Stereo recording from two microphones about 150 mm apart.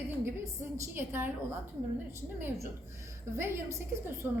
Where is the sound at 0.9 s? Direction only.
15° right (ahead or behind).